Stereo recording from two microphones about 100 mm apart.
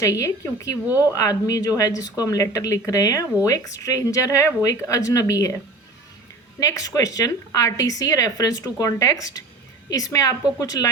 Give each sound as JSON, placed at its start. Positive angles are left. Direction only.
{"t": 0.0, "sound": "a woman's voice", "side_deg": 30}
{"t": 6.6, "sound": "a woman's voice", "side_deg": 35}